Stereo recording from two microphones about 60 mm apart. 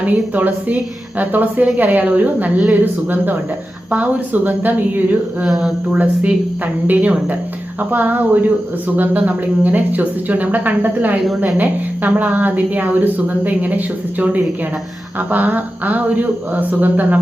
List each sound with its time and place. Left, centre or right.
0.0 s a woman's voice: right
5.5 s speech: centre
5.9 s a woman's voice: centre